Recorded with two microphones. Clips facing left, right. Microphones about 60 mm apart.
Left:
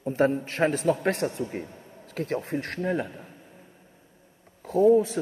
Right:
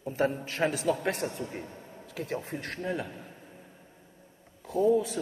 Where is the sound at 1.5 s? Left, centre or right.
Left.